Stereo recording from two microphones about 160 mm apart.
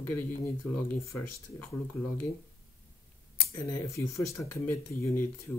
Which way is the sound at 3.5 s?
15° left (ahead or behind).